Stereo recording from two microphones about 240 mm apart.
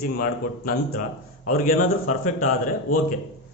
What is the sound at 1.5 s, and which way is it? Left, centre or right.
Speech, left.